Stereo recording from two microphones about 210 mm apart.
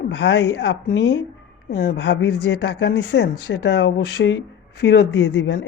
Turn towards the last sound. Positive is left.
turn(degrees=55)  # may be behind; listen again after turning